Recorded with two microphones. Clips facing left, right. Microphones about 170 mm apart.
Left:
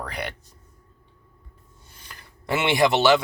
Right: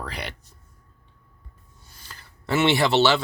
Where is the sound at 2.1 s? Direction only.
15° left (ahead or behind).